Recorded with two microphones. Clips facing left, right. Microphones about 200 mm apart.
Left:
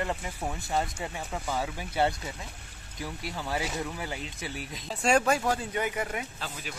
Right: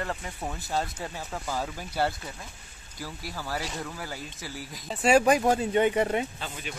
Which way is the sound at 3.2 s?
25° left (ahead or behind).